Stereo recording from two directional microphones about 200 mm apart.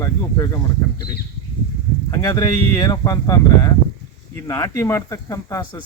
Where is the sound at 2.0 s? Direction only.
20° left (ahead or behind).